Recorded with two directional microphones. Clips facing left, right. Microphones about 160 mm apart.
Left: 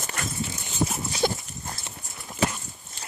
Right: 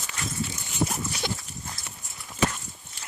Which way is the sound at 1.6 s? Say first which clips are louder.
Left 3 dB; 25° left (ahead or behind).